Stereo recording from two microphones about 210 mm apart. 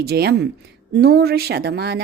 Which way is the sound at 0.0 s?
50° right (ahead or behind).